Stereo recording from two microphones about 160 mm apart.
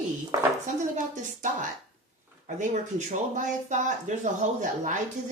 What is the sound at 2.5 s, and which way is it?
A woman's voice, 50° right (ahead or behind).